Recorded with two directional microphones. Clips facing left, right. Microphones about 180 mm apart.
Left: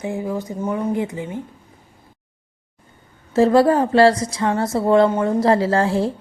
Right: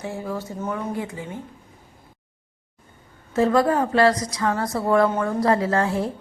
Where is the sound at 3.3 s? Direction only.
30° left (ahead or behind).